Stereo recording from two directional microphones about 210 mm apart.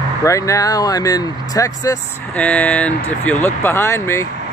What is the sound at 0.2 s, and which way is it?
Speech, 15° left (ahead or behind).